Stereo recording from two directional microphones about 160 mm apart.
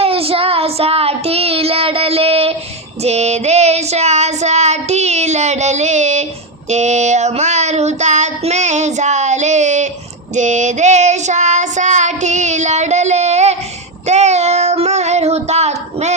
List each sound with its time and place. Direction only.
0.0 s child singing: 35° right (ahead or behind)